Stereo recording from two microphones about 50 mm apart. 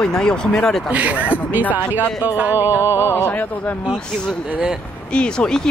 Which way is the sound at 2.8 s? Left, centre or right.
Left.